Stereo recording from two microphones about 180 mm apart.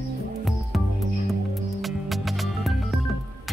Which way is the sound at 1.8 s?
Centre (ahead or behind).